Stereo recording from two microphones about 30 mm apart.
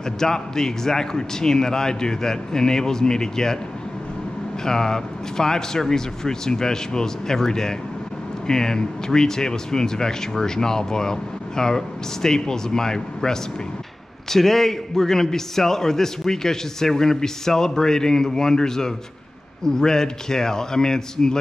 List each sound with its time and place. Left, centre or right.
0.2 s a man's voice: centre
4.6 s a man's voice: centre